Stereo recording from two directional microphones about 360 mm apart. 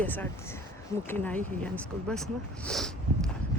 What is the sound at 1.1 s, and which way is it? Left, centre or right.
Speech, centre.